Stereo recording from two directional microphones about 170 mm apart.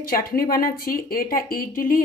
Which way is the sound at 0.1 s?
60° left (ahead or behind).